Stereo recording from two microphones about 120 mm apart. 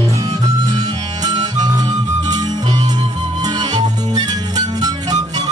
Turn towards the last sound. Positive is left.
turn(degrees=-35)  # may be behind; listen again after turning